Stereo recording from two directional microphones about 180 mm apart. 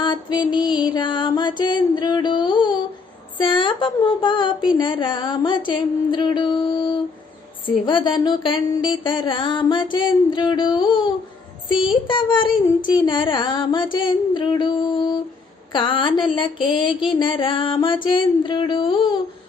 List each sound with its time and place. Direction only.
0.0 s mantra: 25° left (ahead or behind)
3.3 s child singing: 25° left (ahead or behind)